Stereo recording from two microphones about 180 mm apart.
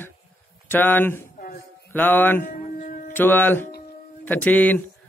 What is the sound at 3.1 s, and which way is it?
Speech, 10° left (ahead or behind).